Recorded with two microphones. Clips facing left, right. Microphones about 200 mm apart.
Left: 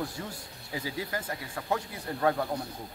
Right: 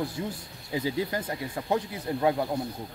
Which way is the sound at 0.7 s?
25° right (ahead or behind).